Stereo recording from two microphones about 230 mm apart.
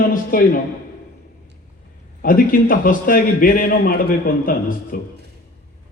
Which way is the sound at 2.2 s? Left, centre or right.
Left.